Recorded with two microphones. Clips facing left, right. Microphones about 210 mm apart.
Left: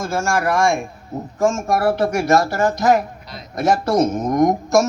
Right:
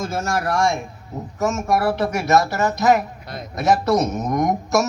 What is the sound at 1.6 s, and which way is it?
Speech, 50° left (ahead or behind).